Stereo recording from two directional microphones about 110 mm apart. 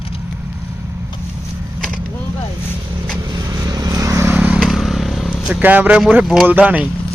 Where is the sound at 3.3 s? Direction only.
35° right (ahead or behind); by 4.5 s 20° right (ahead or behind).